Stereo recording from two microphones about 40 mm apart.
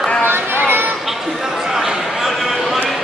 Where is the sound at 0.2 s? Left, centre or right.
Right.